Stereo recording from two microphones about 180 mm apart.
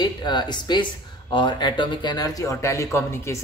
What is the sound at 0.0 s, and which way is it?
Speech, 25° left (ahead or behind).